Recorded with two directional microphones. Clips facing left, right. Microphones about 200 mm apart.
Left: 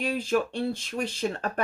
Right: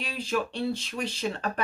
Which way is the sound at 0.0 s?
45° left (ahead or behind).